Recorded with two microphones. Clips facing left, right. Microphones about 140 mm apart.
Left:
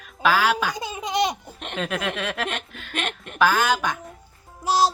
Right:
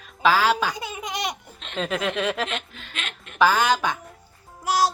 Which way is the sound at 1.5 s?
55° left (ahead or behind).